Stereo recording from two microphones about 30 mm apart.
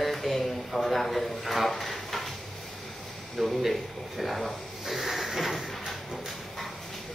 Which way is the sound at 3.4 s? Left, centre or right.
Centre.